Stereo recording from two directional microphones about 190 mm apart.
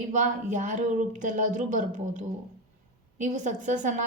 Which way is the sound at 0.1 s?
40° right (ahead or behind).